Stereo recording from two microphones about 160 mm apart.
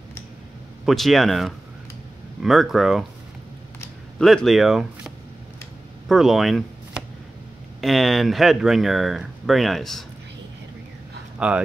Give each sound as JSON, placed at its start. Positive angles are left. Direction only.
{"t": 0.8, "sound": "speech", "side_deg": 0}
{"t": 4.2, "sound": "speech", "side_deg": 0}
{"t": 11.3, "sound": "speech", "side_deg": -5}